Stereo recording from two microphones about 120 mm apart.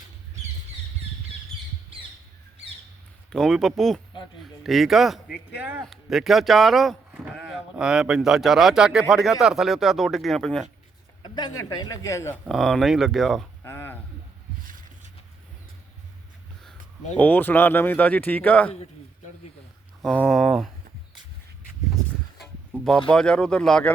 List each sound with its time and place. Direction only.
3.3 s speech: centre (ahead or behind)
5.5 s speech: 15° right (ahead or behind)
5.8 s speech: centre (ahead or behind)
11.2 s speech: 40° left (ahead or behind); by 12.4 s 25° left (ahead or behind)
12.5 s speech: centre (ahead or behind)
13.7 s a sound: 20° left (ahead or behind)
17.2 s speech: 15° left (ahead or behind)
20.2 s speech: centre (ahead or behind)
22.4 s speech: centre (ahead or behind)